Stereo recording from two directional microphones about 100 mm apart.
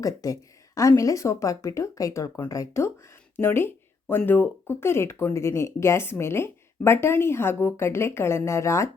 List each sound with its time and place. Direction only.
0.0 s speech: 35° left (ahead or behind)